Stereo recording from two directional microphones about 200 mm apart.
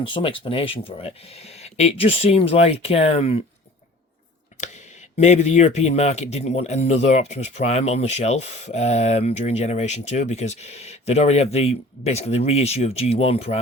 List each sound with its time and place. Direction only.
0.1 s speech: 25° left (ahead or behind)
5.1 s speech: 35° left (ahead or behind)